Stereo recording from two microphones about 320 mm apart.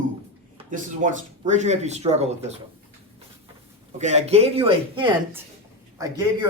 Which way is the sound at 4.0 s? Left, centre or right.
Centre.